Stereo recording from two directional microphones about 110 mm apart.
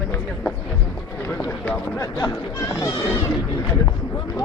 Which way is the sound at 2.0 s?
30° left (ahead or behind).